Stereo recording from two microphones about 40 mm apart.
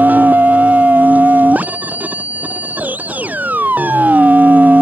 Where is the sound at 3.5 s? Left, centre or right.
Right.